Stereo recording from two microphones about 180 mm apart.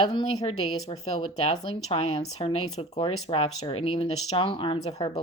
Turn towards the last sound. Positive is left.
turn(degrees=25)  # may be behind; listen again after turning